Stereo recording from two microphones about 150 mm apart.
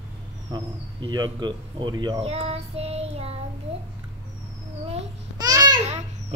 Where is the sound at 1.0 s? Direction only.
30° right (ahead or behind).